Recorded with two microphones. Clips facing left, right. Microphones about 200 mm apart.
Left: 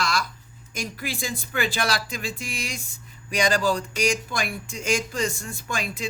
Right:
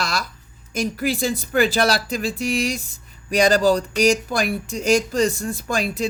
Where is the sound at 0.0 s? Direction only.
40° right (ahead or behind).